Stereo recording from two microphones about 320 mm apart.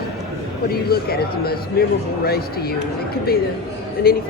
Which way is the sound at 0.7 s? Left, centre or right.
Left.